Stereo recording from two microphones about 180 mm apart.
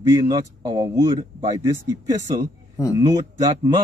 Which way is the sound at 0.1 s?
20° right (ahead or behind).